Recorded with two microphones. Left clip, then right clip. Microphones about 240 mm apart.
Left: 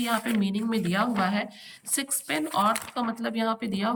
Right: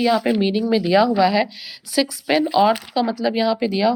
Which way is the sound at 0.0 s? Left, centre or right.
Centre.